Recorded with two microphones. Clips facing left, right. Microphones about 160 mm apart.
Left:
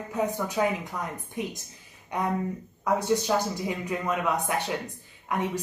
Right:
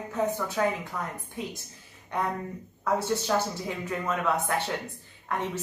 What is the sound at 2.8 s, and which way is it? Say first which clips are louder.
Speech: left 2 dB; 15° left (ahead or behind).